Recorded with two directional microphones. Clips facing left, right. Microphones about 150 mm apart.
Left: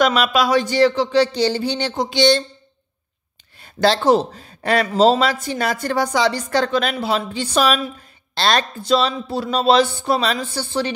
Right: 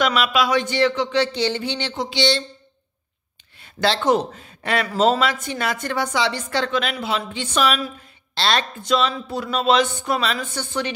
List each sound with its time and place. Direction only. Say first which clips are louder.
0.0 s a woman's voice: left 3 dB; 40° left (ahead or behind)
3.5 s a man's voice: left 4 dB; 40° left (ahead or behind)
4.8 s a woman's voice: left 3 dB; 25° left (ahead or behind)